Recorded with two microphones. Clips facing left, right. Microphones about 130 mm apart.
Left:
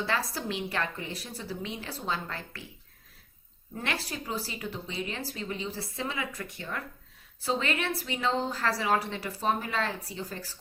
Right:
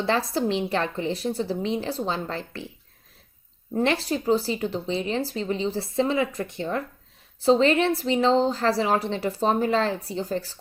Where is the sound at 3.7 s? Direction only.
30° right (ahead or behind).